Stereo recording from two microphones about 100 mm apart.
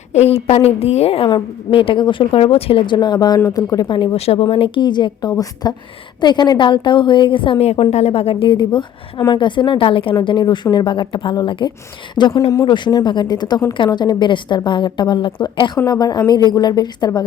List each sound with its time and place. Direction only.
0.1 s a woman's voice: 90° left
1.3 s a woman's voice: 60° left (ahead or behind)
2.8 s a woman's voice: 50° left (ahead or behind)
4.3 s a woman's voice: 70° left (ahead or behind)
10.2 s a woman's voice: 50° left (ahead or behind)
12.3 s speech: 30° left (ahead or behind)
12.6 s a woman's voice: 50° left (ahead or behind)